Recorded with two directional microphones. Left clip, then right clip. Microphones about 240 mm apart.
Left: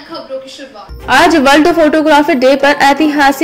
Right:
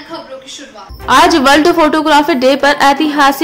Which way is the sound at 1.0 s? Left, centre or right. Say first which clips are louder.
Even; centre.